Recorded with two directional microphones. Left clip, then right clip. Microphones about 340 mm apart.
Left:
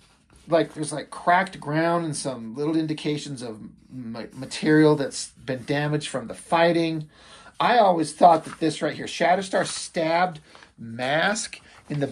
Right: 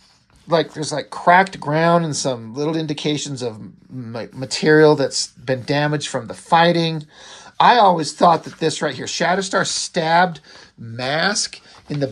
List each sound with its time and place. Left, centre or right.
0.5 s speech: right